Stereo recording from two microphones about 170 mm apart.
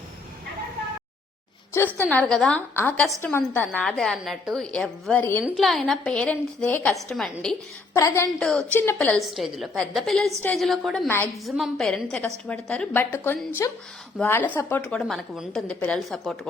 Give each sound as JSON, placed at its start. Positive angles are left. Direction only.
{"t": 2.0, "sound": "a woman's voice", "side_deg": 5}
{"t": 5.5, "sound": "a woman's voice", "side_deg": 0}
{"t": 7.9, "sound": "a woman's voice", "side_deg": 15}
{"t": 8.4, "sound": "a woman's voice", "side_deg": 5}